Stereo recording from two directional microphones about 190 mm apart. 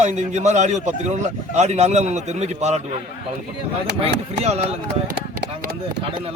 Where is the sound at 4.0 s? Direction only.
35° right (ahead or behind).